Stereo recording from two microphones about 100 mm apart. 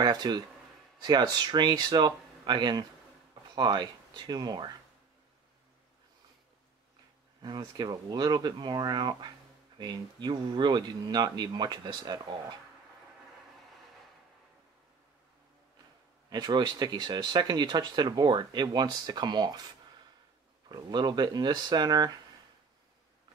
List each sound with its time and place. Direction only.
0.0 s speech: 45° right (ahead or behind)
7.4 s speech: 45° right (ahead or behind)
16.3 s speech: 45° right (ahead or behind)
20.6 s speech: 45° right (ahead or behind)